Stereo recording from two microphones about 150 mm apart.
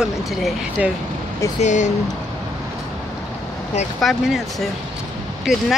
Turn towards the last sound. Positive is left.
turn(degrees=0)  # may be behind; listen again after turning